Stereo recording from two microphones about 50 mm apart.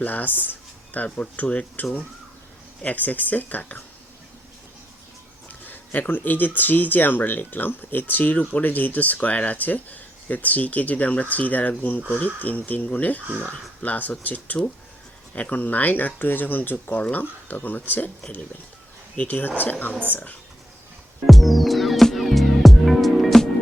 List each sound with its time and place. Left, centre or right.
0.0 s speech: left
5.6 s speech: left
19.1 s speech: left
21.2 s music: centre